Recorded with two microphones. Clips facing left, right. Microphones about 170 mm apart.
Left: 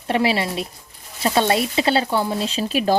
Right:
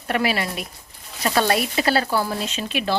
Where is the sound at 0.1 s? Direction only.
25° left (ahead or behind).